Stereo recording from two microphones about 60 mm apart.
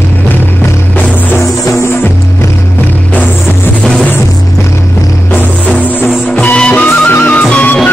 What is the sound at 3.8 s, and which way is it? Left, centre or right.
Music, centre.